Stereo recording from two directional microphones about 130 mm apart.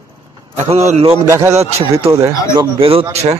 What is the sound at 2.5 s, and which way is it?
Speech, 40° right (ahead or behind).